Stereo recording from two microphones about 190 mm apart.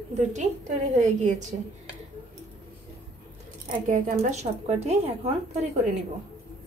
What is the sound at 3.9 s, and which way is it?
A woman's voice, 45° right (ahead or behind).